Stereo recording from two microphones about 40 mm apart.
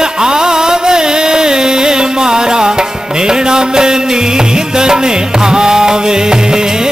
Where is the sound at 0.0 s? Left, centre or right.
Centre.